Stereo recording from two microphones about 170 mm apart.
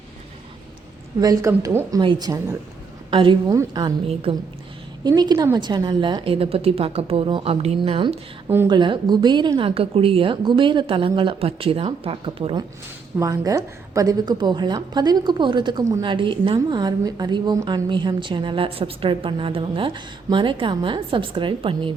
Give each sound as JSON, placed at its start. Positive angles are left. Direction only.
{"t": 1.2, "sound": "a woman's voice", "side_deg": -20}
{"t": 5.0, "sound": "a woman's voice", "side_deg": -25}
{"t": 13.1, "sound": "a woman's voice", "side_deg": -20}